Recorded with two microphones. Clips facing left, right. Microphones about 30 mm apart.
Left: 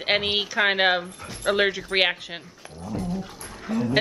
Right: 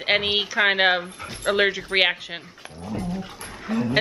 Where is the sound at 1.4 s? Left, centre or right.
Centre.